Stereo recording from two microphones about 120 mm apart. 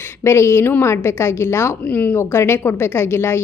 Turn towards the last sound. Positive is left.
turn(degrees=20)  # may be behind; listen again after turning